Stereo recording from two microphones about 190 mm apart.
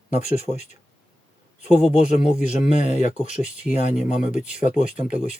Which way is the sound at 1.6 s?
35° left (ahead or behind).